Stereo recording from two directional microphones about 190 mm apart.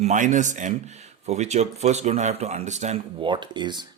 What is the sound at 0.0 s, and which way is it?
Speech, 40° right (ahead or behind).